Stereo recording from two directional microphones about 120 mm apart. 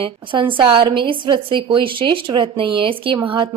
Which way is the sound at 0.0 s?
45° right (ahead or behind).